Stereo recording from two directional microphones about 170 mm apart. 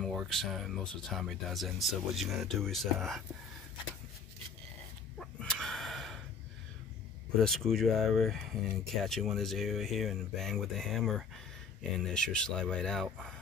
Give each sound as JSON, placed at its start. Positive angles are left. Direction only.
{"t": 0.0, "sound": "speech", "side_deg": 0}
{"t": 5.2, "sound": "a sound", "side_deg": 5}
{"t": 7.3, "sound": "speech", "side_deg": 0}